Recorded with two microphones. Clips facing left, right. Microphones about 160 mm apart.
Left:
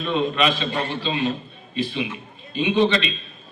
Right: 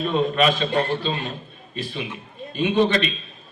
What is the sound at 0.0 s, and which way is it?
A man's voice, 45° right (ahead or behind).